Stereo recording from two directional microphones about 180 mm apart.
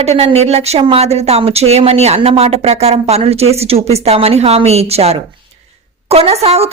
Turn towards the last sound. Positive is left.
turn(degrees=-35)  # may be behind; listen again after turning